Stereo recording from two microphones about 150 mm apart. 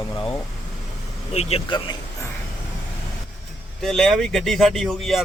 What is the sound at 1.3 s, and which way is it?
Speech, 45° left (ahead or behind).